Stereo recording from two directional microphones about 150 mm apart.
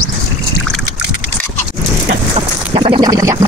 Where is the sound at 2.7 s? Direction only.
35° right (ahead or behind).